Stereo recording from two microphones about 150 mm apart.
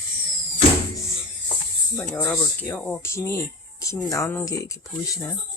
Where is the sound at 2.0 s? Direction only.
5° left (ahead or behind); by 5.2 s 20° left (ahead or behind).